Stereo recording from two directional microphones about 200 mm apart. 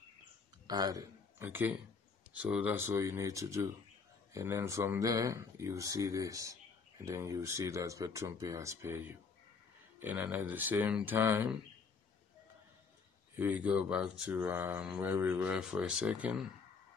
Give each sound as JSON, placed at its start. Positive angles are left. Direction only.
{"t": 0.7, "sound": "speech", "side_deg": -20}
{"t": 13.4, "sound": "speech", "side_deg": -5}